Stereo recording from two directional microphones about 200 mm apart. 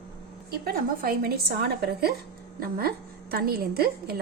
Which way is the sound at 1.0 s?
50° right (ahead or behind).